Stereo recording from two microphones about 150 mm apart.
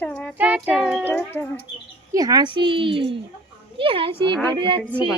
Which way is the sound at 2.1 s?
25° right (ahead or behind).